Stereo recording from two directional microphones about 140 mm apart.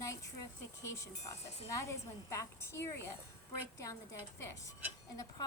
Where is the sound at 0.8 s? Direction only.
20° left (ahead or behind).